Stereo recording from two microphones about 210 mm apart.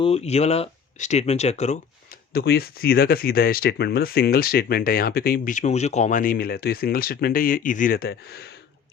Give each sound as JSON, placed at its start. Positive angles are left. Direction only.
{"t": 0.0, "sound": "speech", "side_deg": 30}
{"t": 2.3, "sound": "speech", "side_deg": 50}